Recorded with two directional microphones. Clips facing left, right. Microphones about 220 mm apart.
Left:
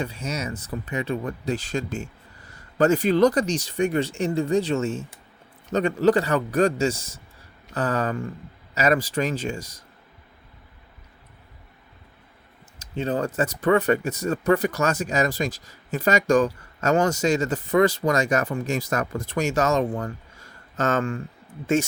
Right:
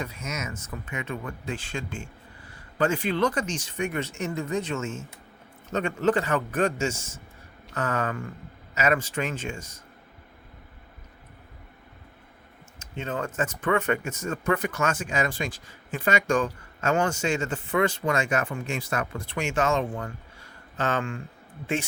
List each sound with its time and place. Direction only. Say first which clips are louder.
0.0 s speech: left 5 dB; 30° left (ahead or behind)
12.8 s speech: left 6 dB; 35° left (ahead or behind)